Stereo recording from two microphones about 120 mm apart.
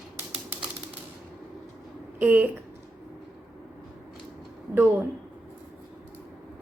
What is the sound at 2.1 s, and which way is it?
Speech, 15° right (ahead or behind).